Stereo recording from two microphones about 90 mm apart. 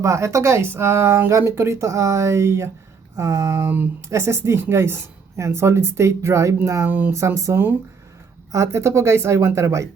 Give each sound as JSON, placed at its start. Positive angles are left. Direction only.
{"t": 0.0, "sound": "speech", "side_deg": -35}